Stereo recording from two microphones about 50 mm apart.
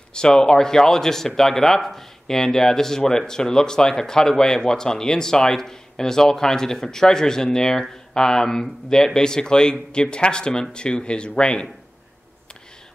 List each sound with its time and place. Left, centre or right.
0.1 s speech: centre